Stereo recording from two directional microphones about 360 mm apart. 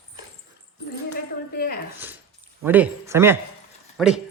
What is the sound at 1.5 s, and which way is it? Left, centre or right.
Speech, left.